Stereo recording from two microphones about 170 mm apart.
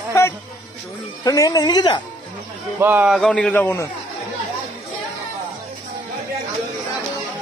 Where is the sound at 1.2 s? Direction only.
20° left (ahead or behind).